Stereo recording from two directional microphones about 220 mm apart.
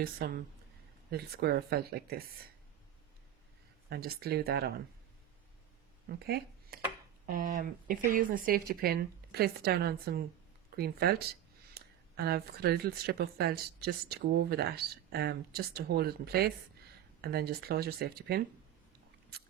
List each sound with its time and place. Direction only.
0.0 s speech: 45° right (ahead or behind)
3.8 s speech: 45° right (ahead or behind)
6.1 s speech: 45° right (ahead or behind)